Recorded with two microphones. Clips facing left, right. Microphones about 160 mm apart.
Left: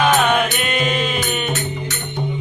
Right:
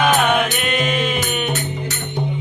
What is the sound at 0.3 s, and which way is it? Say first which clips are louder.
Music: even; centre (ahead or behind).